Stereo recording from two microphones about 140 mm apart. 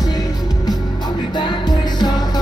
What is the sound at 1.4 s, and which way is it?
Music, 30° left (ahead or behind).